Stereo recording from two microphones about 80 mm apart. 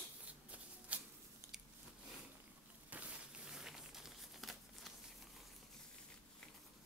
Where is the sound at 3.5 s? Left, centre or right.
Centre.